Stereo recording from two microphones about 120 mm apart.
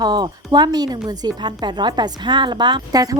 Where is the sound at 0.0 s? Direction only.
35° right (ahead or behind).